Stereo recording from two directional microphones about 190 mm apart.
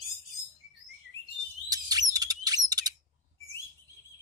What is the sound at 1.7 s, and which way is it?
Bird, 20° right (ahead or behind).